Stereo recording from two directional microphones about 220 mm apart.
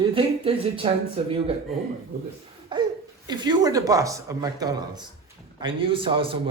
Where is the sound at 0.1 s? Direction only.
25° right (ahead or behind).